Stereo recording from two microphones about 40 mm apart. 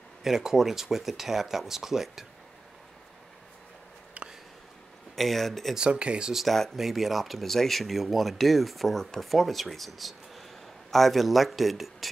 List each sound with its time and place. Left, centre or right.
0.2 s speech: centre
4.2 s a sound: right
5.1 s speech: centre
5.8 s speech: right
6.3 s speech: centre